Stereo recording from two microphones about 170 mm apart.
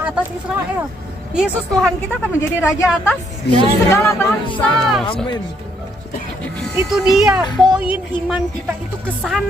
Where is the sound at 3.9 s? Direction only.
15° left (ahead or behind).